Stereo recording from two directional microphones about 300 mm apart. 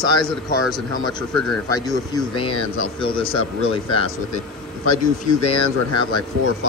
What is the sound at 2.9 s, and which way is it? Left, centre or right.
Speech, centre.